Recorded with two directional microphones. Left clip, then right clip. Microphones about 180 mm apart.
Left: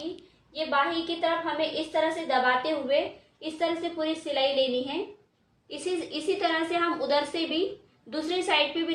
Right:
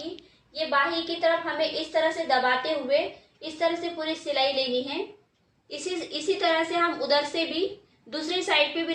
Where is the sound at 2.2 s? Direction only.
15° left (ahead or behind).